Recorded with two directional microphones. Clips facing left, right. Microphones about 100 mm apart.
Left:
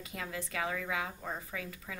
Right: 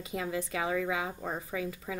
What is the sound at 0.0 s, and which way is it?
A woman's voice, 20° right (ahead or behind).